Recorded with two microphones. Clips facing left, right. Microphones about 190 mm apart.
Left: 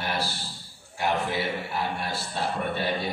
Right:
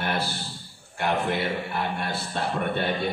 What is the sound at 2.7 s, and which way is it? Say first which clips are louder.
Speech: right 2 dB; 55° right (ahead or behind).